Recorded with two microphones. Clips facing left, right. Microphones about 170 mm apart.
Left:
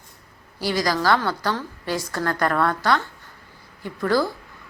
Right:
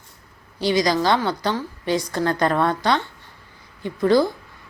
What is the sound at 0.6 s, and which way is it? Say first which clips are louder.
A woman's voice: right 3 dB; 20° right (ahead or behind).